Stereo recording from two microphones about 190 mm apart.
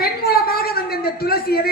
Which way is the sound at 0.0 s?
55° left (ahead or behind).